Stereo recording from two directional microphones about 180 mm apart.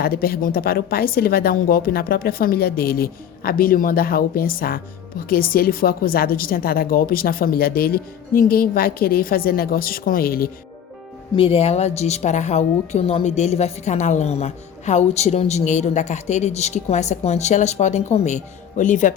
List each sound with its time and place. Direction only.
0.0 s a woman's voice: 55° left (ahead or behind)
11.3 s a woman's voice: 30° left (ahead or behind)